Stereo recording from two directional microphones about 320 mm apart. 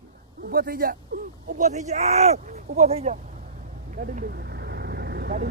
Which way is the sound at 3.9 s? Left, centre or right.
Right.